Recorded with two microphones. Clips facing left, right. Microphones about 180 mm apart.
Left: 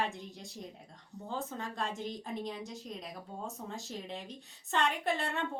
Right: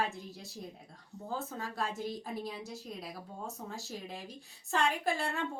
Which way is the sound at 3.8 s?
5° right (ahead or behind).